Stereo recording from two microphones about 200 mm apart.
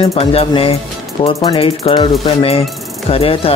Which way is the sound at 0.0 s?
30° left (ahead or behind).